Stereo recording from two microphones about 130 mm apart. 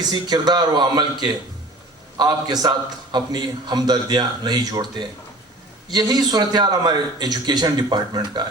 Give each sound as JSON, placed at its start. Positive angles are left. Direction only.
{"t": 0.0, "sound": "a man's voice", "side_deg": -30}